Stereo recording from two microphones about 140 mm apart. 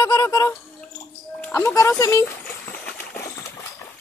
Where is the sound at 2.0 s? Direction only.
20° left (ahead or behind).